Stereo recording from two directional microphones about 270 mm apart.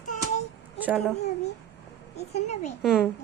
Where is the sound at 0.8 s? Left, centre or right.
Centre.